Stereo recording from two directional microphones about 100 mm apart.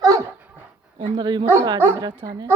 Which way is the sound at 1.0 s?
50° right (ahead or behind).